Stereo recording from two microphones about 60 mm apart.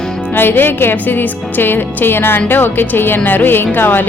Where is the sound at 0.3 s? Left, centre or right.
Left.